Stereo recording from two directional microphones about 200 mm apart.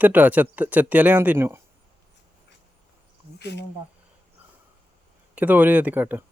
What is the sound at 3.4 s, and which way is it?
Speech, 55° left (ahead or behind).